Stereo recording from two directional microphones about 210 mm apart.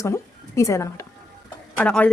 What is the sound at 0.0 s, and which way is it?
A woman's voice, 15° left (ahead or behind).